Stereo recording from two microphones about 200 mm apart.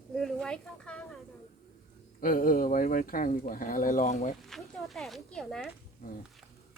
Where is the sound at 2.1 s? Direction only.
45° left (ahead or behind).